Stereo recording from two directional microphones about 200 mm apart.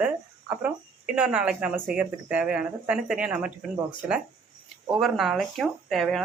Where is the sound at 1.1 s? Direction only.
5° right (ahead or behind).